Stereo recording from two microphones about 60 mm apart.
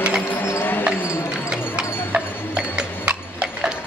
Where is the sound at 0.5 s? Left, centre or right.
Left.